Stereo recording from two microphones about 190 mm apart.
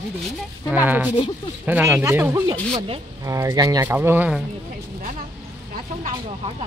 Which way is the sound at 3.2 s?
15° right (ahead or behind).